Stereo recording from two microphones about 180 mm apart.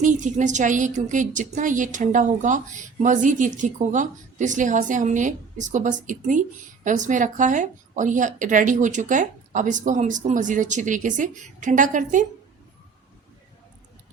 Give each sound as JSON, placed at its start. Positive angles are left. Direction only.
{"t": 0.0, "sound": "a woman's voice", "side_deg": -45}